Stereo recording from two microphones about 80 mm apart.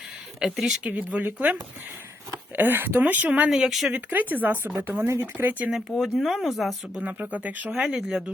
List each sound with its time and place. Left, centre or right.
0.3 s speech: centre
0.9 s speech: centre
2.6 s speech: right
3.5 s speech: centre
3.9 s speech: right
6.0 s speech: centre
7.0 s speech: centre
7.9 s speech: centre